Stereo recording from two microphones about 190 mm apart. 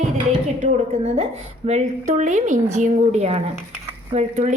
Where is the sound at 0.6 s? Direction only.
40° right (ahead or behind).